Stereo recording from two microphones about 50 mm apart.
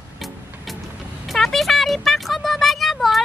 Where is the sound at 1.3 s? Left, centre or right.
Centre.